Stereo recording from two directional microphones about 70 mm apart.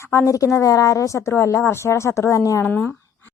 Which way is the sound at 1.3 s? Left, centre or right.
Left.